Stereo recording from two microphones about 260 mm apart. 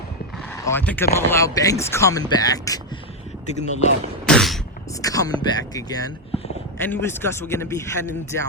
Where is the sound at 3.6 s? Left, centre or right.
Left.